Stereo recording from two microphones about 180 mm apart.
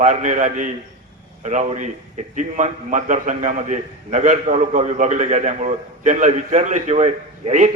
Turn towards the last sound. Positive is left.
turn(degrees=-40)  # may be behind; listen again after turning